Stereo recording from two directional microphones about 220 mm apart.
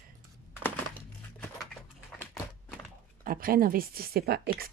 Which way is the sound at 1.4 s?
5° left (ahead or behind).